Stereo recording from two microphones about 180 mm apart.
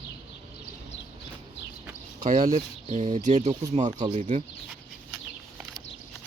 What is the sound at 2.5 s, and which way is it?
Speech, 40° right (ahead or behind).